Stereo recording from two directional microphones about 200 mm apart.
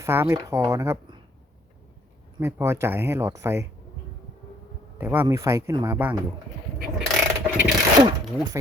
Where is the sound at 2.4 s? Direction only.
15° right (ahead or behind).